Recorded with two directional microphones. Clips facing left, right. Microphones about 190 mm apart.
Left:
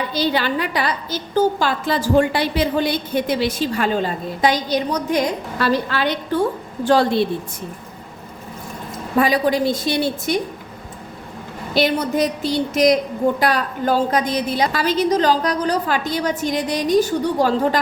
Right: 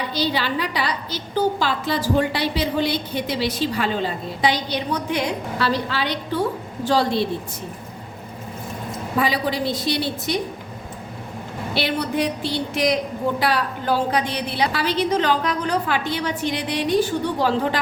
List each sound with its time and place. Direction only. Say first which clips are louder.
0.1 s a woman's voice: left 3 dB; 50° left (ahead or behind)
9.1 s a woman's voice: left 5 dB; 50° left (ahead or behind)
11.7 s a woman's voice: left 5 dB; 45° left (ahead or behind)